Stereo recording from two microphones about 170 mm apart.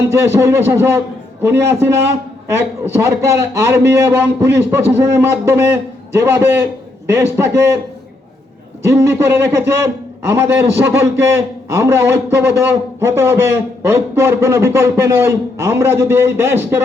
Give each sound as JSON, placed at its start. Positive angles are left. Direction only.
{"t": 0.1, "sound": "a man's voice", "side_deg": -15}
{"t": 8.9, "sound": "a man's voice", "side_deg": -15}